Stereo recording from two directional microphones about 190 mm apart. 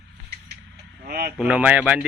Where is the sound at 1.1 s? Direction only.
50° right (ahead or behind).